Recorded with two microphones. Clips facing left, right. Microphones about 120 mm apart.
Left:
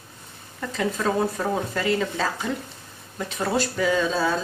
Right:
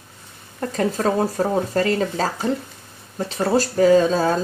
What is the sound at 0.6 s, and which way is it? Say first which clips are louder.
Speech: right 5 dB; 45° right (ahead or behind).